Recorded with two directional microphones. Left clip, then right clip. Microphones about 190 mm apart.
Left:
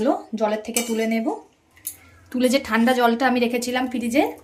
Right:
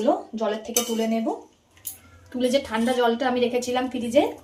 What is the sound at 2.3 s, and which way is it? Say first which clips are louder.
A woman's voice: left 3 dB; 55° left (ahead or behind).